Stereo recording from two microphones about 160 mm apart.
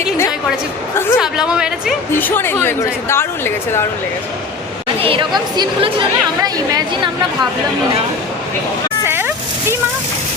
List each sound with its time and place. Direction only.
1.2 s a woman's voice: 5° right (ahead or behind)
2.1 s a woman's voice: 10° left (ahead or behind)
4.9 s speech: 35° right (ahead or behind)
9.0 s vehicle: 15° right (ahead or behind)